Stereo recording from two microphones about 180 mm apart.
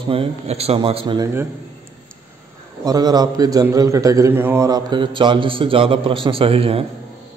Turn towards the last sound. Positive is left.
turn(degrees=-30)  # may be behind; listen again after turning